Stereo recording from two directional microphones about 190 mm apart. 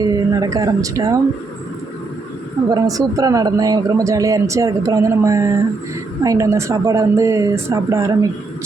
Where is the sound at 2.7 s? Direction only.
20° right (ahead or behind).